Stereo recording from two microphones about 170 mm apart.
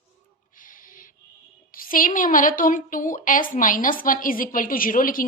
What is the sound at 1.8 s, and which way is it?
A woman's voice, 55° left (ahead or behind).